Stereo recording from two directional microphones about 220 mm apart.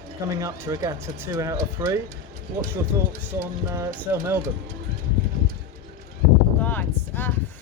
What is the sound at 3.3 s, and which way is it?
Speech, 15° right (ahead or behind).